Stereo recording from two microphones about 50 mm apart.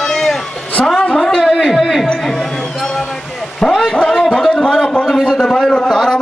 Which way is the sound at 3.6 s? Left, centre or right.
Centre.